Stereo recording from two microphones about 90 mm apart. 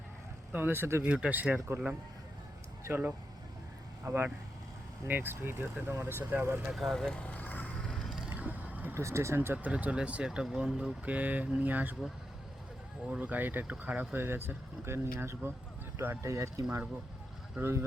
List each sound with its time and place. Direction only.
0.5 s speech: 25° right (ahead or behind)
1.0 s speech: 15° right (ahead or behind)
2.8 s speech: 25° right (ahead or behind)
6.7 s vehicle: 5° left (ahead or behind)
8.3 s a sound: 20° right (ahead or behind)
9.0 s speech: 30° right (ahead or behind)
13.1 s speech: 15° right (ahead or behind); by 17.8 s 30° right (ahead or behind)